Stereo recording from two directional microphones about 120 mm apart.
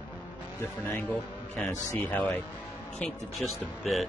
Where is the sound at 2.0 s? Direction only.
15° left (ahead or behind).